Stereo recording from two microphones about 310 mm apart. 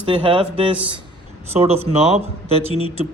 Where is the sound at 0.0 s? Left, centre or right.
Centre.